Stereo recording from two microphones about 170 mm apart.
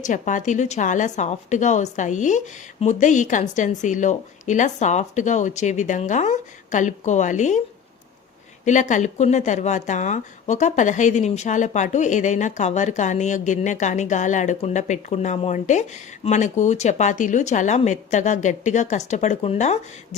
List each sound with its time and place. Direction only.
0.0 s speech: 50° left (ahead or behind)
8.6 s speech: 45° left (ahead or behind)